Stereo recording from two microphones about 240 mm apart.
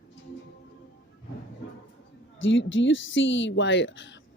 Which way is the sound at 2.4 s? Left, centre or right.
Left.